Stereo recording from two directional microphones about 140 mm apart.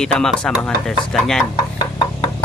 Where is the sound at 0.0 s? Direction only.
5° left (ahead or behind).